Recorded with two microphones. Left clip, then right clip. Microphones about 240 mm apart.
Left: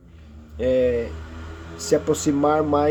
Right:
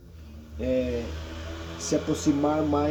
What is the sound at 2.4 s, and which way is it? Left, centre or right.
Speech, left.